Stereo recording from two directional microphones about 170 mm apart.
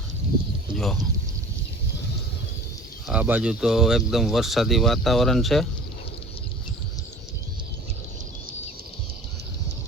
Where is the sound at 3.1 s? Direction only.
10° right (ahead or behind).